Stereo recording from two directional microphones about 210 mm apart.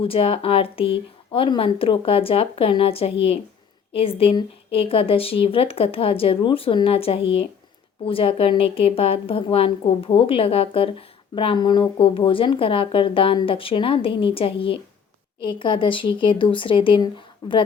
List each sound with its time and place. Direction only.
0.0 s speech: 25° left (ahead or behind)